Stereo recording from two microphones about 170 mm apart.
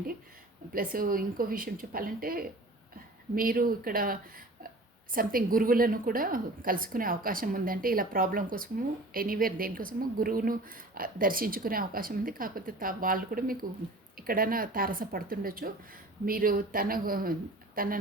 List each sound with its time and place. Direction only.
0.7 s a woman's voice: 55° right (ahead or behind)